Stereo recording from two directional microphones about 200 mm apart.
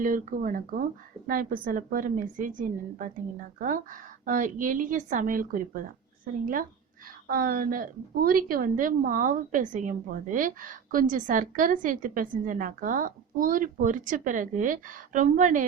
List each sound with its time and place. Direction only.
0.0 s a woman's voice: 40° right (ahead or behind)